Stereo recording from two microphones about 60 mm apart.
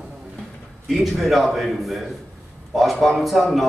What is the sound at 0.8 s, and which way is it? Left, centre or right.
A man's voice, centre.